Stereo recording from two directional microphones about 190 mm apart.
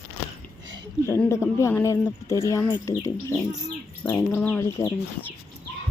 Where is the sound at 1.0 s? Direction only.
15° left (ahead or behind).